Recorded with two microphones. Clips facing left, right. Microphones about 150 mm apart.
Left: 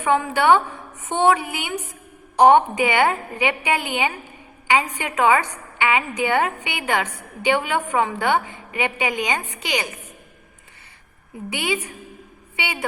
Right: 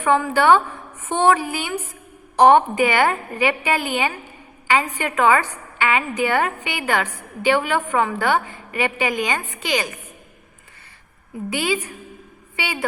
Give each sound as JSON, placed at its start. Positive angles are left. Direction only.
{"t": 0.0, "sound": "a woman's voice", "side_deg": 15}
{"t": 11.5, "sound": "a woman's voice", "side_deg": 20}